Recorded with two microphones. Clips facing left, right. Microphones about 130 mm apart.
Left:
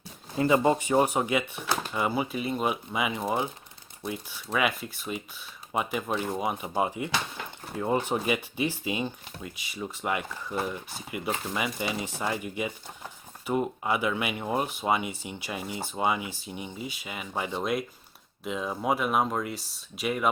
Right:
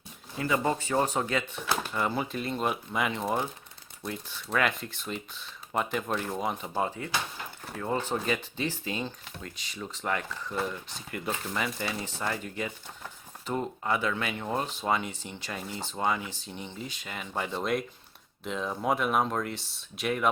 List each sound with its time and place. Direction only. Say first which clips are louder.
0.3 s speech: left 5 dB; 25° left (ahead or behind); by 20.3 s 5° left (ahead or behind)